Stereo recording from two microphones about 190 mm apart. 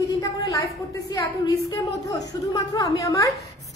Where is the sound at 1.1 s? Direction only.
20° left (ahead or behind).